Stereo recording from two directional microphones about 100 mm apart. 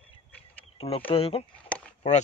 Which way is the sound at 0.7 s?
75° left (ahead or behind).